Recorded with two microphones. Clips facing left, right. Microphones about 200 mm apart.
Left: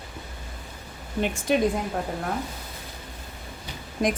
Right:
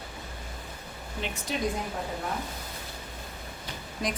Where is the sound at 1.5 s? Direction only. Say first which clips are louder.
Left 10 dB; 60° left (ahead or behind).